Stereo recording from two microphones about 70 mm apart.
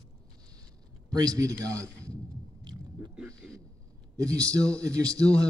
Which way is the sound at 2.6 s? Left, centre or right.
Right.